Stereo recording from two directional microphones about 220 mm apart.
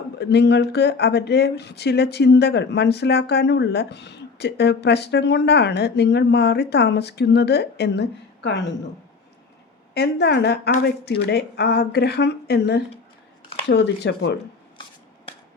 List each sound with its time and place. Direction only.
0.2 s speech: 50° left (ahead or behind)
9.9 s speech: 50° left (ahead or behind)